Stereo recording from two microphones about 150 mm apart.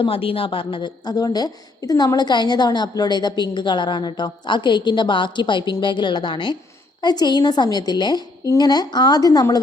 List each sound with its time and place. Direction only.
0.0 s a woman's voice: 40° left (ahead or behind)